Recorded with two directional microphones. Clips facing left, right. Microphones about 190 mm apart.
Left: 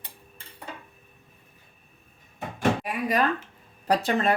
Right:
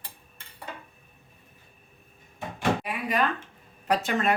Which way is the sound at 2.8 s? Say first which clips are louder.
Left 2 dB; 40° left (ahead or behind).